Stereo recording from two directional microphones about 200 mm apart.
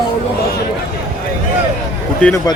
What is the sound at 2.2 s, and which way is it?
Speech, 5° left (ahead or behind).